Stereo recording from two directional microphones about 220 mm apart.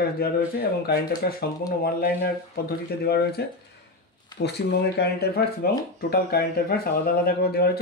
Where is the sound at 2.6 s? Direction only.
45° left (ahead or behind).